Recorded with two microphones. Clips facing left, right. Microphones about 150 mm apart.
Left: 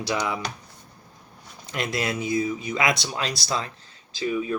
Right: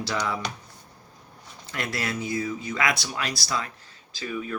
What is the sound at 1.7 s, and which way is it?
Speech, 20° left (ahead or behind).